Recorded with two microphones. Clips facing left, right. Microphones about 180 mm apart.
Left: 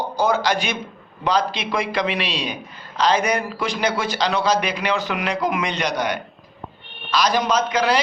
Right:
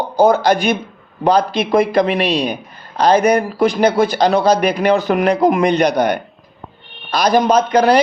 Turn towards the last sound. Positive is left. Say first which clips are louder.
# right 7 dB
turn(degrees=-55)  # may be behind; listen again after turning